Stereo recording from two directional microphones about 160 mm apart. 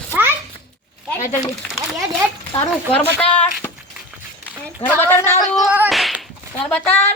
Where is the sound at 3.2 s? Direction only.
35° left (ahead or behind).